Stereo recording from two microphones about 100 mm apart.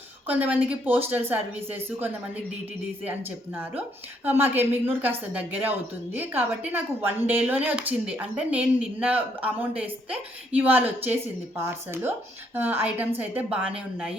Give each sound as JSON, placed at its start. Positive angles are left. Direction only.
{"t": 0.3, "sound": "a woman's voice", "side_deg": -15}